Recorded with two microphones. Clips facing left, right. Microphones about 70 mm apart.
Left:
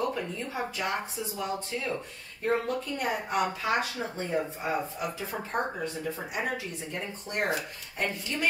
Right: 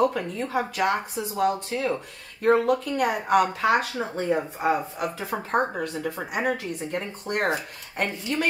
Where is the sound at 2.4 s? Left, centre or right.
Right.